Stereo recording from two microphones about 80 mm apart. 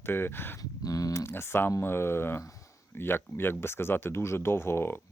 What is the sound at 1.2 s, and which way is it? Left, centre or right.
Speech, left.